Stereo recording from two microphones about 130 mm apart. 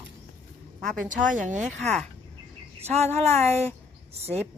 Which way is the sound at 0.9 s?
85° right.